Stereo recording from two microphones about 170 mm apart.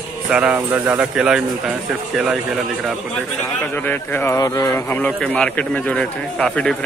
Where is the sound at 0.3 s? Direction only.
10° right (ahead or behind).